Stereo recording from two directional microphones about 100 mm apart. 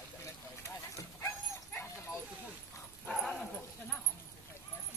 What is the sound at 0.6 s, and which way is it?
Dog, 30° left (ahead or behind).